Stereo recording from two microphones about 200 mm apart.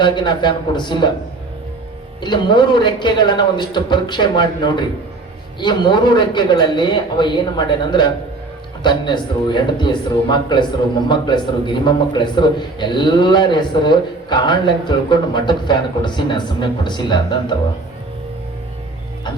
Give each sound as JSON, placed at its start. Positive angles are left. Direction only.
{"t": 0.0, "sound": "a man's voice", "side_deg": 20}
{"t": 2.2, "sound": "a man's voice", "side_deg": 20}